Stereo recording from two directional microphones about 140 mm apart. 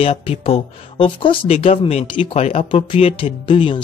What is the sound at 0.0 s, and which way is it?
Speech, 45° left (ahead or behind).